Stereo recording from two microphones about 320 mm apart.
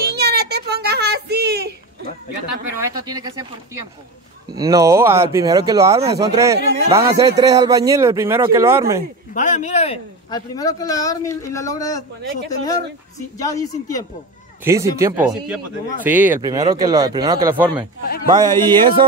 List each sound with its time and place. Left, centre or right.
0.1 s a sound: right
2.7 s a man's voice: centre
9.3 s speech: left
13.4 s speech: centre
14.6 s a man's voice: centre